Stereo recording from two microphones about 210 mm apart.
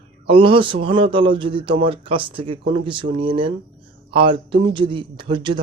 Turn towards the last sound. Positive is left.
turn(degrees=-20)  # may be behind; listen again after turning